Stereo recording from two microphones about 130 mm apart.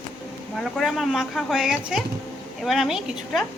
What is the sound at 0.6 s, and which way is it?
Speech, centre (ahead or behind).